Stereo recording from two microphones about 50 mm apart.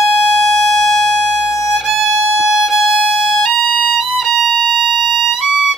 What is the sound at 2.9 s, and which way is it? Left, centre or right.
Music, centre.